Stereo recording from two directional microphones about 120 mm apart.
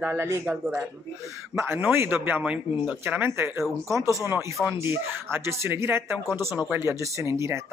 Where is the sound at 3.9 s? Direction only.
25° right (ahead or behind).